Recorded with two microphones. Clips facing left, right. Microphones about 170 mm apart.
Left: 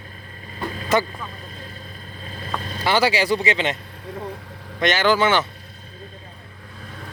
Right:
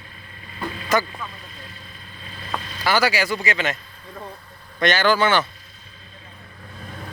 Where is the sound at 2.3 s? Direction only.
45° left (ahead or behind).